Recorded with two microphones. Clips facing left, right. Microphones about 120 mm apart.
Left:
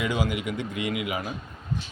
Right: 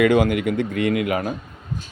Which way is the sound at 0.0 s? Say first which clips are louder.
Right 10 dB; 60° right (ahead or behind).